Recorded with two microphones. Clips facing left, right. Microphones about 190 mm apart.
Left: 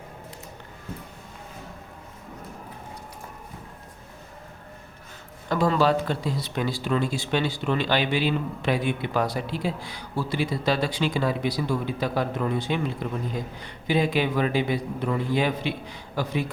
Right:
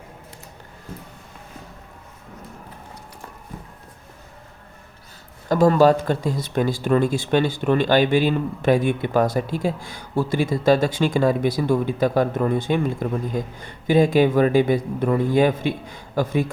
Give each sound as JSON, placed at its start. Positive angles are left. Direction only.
{"t": 5.5, "sound": "speech", "side_deg": -45}